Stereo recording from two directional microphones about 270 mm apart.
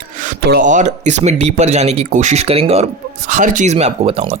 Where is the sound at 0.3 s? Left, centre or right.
Right.